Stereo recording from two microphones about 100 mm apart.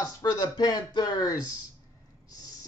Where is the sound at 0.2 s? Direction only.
40° left (ahead or behind).